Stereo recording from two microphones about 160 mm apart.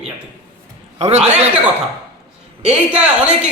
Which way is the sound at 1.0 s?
40° right (ahead or behind).